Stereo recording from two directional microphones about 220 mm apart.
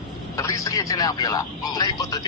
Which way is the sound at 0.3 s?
15° left (ahead or behind).